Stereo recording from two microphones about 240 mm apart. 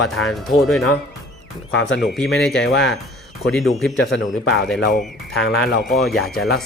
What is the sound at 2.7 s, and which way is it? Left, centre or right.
Speech, left.